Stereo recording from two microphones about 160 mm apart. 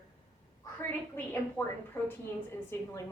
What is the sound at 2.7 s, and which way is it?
Speech, 15° left (ahead or behind).